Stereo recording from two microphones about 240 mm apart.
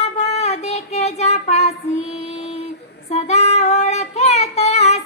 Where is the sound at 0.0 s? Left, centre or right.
Left.